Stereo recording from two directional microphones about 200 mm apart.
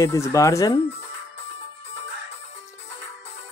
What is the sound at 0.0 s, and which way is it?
Speech, 15° left (ahead or behind).